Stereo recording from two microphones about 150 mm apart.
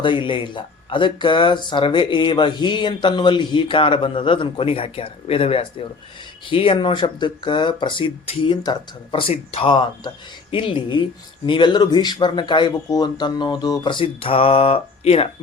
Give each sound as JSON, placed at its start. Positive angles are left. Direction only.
{"t": 0.0, "sound": "speech", "side_deg": 30}